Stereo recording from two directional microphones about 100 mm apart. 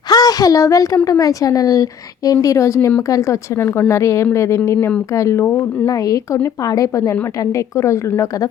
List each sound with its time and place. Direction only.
0.1 s a woman's voice: 40° left (ahead or behind)